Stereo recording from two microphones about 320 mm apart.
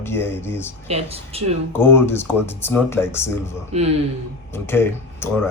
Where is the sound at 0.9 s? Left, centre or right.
Centre.